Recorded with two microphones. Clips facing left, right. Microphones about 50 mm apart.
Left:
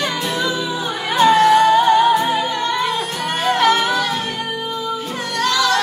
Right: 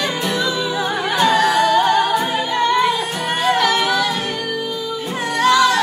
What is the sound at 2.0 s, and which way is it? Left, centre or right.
Music, centre.